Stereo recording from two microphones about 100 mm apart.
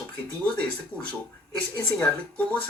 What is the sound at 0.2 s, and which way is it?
Speech, 15° left (ahead or behind).